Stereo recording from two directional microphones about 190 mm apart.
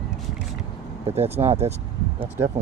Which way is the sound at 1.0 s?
35° right (ahead or behind).